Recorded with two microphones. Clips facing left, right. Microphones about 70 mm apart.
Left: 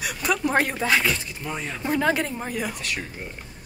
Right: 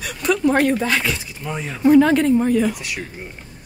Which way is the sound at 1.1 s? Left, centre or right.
Centre.